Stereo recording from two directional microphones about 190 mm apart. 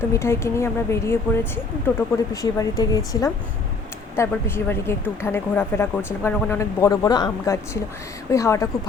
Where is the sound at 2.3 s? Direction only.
15° left (ahead or behind).